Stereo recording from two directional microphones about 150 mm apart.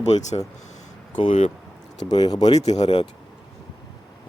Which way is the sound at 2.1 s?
25° left (ahead or behind).